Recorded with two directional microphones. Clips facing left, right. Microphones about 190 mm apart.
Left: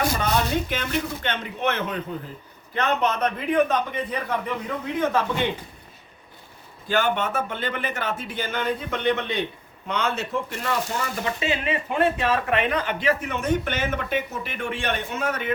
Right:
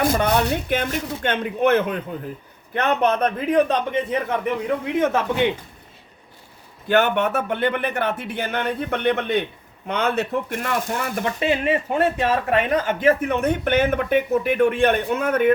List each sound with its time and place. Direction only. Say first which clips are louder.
0.1 s speech: right 4 dB; 65° right (ahead or behind)
3.5 s a man's voice: right 3 dB; 30° right (ahead or behind)
6.8 s speech: right 5 dB; 65° right (ahead or behind)